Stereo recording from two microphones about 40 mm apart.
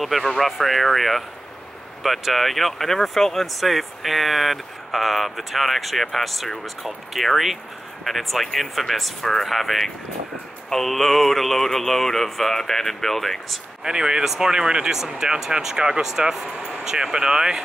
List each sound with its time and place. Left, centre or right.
0.0 s speech: centre
13.8 s speech: centre